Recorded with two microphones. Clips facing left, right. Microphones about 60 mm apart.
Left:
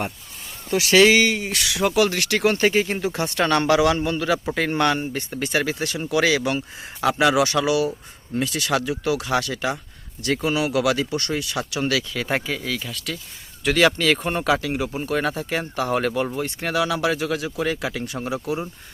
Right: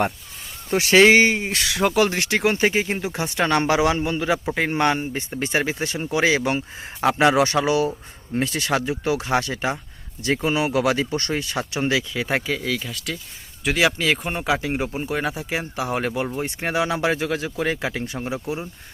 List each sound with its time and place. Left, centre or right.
0.7 s speech: right
12.3 s speech: centre
14.4 s speech: right